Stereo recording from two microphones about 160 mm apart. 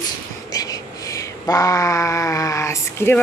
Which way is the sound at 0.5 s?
25° left (ahead or behind).